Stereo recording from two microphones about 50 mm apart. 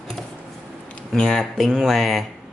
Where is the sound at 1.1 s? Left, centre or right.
Centre.